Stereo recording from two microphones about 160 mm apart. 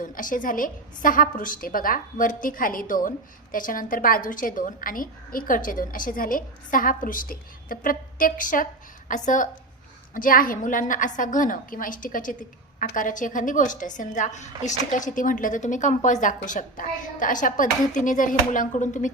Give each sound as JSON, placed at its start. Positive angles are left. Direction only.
{"t": 0.0, "sound": "a woman's voice", "side_deg": 55}